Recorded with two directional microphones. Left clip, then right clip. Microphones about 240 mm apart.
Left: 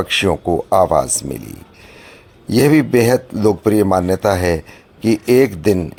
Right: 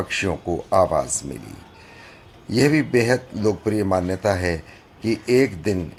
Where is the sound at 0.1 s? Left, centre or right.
Left.